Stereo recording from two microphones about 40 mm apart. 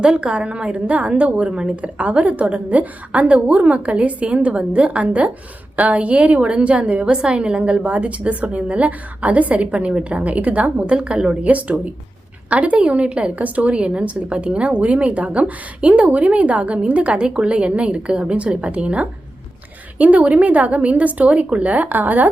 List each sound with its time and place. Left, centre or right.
0.0 s a woman's voice: right
1.5 s a woman's voice: centre
1.7 s a woman's voice: right
11.4 s a woman's voice: right